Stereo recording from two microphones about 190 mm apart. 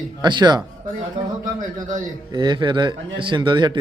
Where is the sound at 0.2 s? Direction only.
25° right (ahead or behind).